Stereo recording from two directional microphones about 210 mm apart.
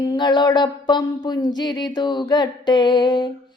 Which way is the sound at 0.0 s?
20° left (ahead or behind).